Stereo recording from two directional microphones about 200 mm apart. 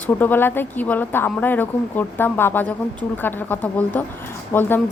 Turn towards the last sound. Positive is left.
turn(degrees=10)  # may be behind; listen again after turning